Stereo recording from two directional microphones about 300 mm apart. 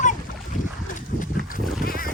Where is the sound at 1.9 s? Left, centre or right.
Left.